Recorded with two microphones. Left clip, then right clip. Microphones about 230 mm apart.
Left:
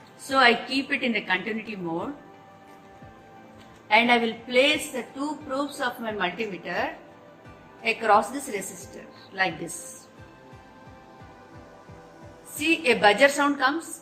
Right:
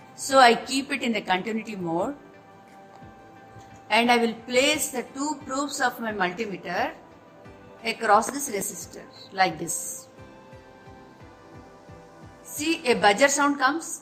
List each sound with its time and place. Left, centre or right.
0.3 s a woman's voice: right
3.8 s a woman's voice: right
12.5 s a woman's voice: right